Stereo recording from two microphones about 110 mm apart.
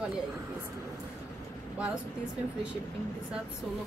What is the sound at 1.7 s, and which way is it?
Speech, 10° right (ahead or behind).